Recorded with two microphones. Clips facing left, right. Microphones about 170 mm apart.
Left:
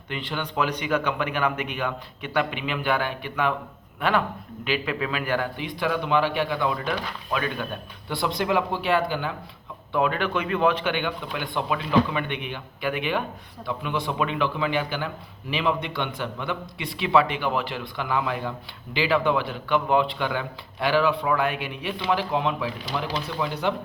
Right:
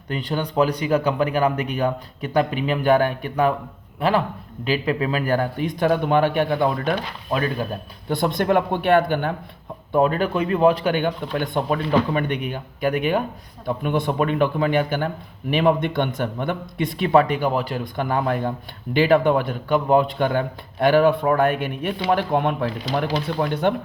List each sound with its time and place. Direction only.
0.1 s a man's voice: 40° right (ahead or behind)
7.3 s a man's voice: 35° right (ahead or behind)
8.1 s speech: 50° right (ahead or behind)
9.9 s a man's voice: 40° right (ahead or behind)